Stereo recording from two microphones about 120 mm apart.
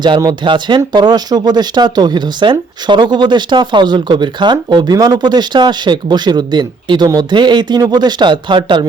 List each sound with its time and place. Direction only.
0.4 s speech: 40° right (ahead or behind)